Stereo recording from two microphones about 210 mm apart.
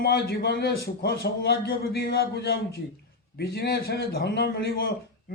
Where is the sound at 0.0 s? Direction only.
50° left (ahead or behind).